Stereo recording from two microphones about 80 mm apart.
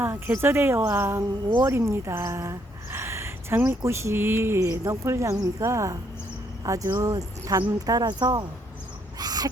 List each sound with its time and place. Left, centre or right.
0.0 s speech: right
7.9 s speech: right
9.1 s owl: right